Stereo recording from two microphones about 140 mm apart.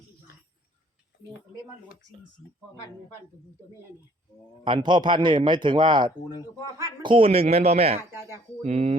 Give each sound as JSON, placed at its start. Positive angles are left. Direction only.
{"t": 4.6, "sound": "a man's voice", "side_deg": -35}